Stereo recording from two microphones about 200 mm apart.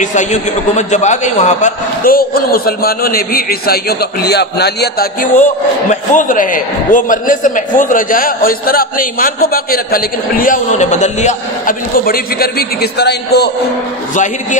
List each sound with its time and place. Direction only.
0.0 s a man's voice: 40° left (ahead or behind); by 13.5 s 55° left (ahead or behind)
14.1 s a man's voice: 40° left (ahead or behind)